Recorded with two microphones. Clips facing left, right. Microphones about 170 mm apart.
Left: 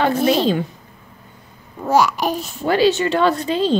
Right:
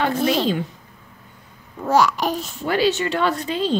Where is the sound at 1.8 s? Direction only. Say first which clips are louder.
Left 1 dB; 10° left (ahead or behind).